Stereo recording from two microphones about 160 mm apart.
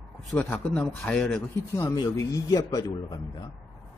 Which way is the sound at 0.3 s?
10° left (ahead or behind).